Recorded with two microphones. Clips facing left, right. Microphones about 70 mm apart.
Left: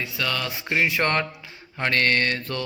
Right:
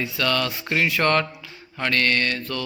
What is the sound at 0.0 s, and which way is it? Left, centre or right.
Mantra, centre.